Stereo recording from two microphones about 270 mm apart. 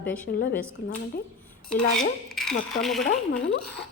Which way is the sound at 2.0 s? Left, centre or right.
Centre.